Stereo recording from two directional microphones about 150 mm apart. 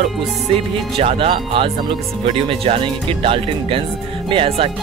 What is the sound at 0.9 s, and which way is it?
Speech, 40° right (ahead or behind).